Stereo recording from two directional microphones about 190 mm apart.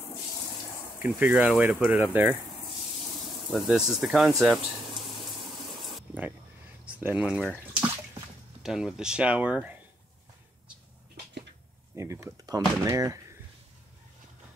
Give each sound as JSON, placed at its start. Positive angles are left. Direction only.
{"t": 0.9, "sound": "speech", "side_deg": -10}
{"t": 3.4, "sound": "speech", "side_deg": 0}
{"t": 5.8, "sound": "spray", "side_deg": 0}
{"t": 6.9, "sound": "speech", "side_deg": -10}
{"t": 11.9, "sound": "speech", "side_deg": -15}